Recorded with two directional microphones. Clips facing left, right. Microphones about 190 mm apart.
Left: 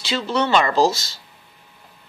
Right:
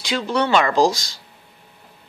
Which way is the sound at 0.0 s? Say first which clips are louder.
Right 1 dB; 10° right (ahead or behind).